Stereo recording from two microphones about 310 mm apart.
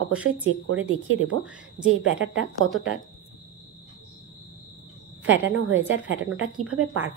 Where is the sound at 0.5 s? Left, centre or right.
Right.